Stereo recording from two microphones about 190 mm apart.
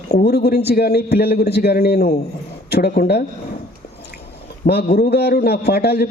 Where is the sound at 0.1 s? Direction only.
60° left (ahead or behind).